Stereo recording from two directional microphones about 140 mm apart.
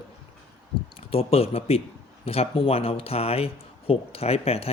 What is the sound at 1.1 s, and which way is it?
A man's voice, 45° left (ahead or behind).